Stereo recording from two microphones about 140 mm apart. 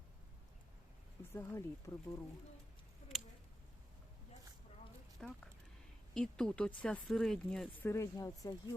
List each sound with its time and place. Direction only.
1.3 s speech: 20° left (ahead or behind)
5.2 s speech: 5° left (ahead or behind)
7.8 s speech: 20° left (ahead or behind)